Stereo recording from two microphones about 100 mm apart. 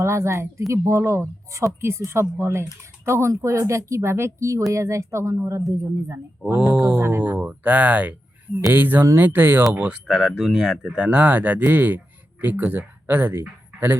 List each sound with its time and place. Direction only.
0.0 s speech: 30° right (ahead or behind)
6.4 s speech: centre (ahead or behind)
6.7 s speech: 20° right (ahead or behind)